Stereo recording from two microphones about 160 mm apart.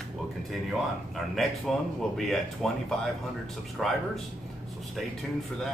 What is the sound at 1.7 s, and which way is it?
Speech, centre (ahead or behind).